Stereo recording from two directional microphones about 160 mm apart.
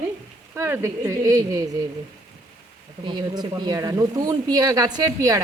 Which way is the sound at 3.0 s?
30° right (ahead or behind).